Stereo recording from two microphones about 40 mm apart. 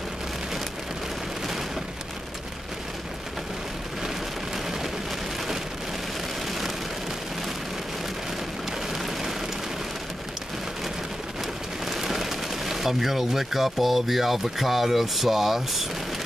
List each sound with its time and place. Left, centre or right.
8.9 s rain on surface: centre
11.8 s speech: centre